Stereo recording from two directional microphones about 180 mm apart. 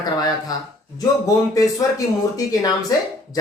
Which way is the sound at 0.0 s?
20° left (ahead or behind).